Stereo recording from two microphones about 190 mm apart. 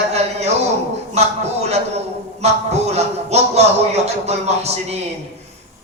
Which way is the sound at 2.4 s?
35° right (ahead or behind).